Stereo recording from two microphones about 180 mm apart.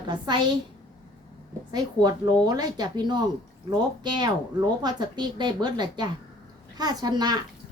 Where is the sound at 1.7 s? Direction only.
20° right (ahead or behind).